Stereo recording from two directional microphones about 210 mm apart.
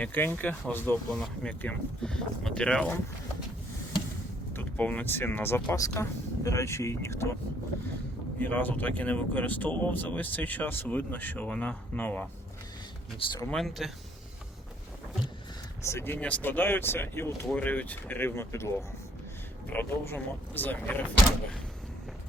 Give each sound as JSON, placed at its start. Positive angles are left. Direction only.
{"t": 0.0, "sound": "speech", "side_deg": 10}
{"t": 4.5, "sound": "speech", "side_deg": 10}
{"t": 8.4, "sound": "speech", "side_deg": 10}
{"t": 13.1, "sound": "speech", "side_deg": 20}
{"t": 13.5, "sound": "speech", "side_deg": 0}
{"t": 15.9, "sound": "speech", "side_deg": 10}